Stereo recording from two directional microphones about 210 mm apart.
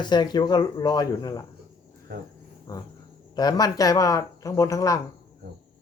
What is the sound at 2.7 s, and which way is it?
Speech, 15° left (ahead or behind).